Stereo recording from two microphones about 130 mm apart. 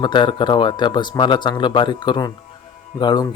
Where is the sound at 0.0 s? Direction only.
35° left (ahead or behind).